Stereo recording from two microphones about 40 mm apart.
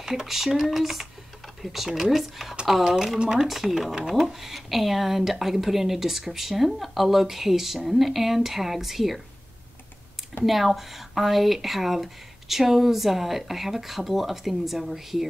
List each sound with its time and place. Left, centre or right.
0.0 s speech: centre
10.4 s speech: centre